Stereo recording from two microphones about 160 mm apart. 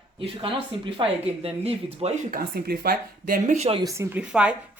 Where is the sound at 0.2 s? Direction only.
35° right (ahead or behind).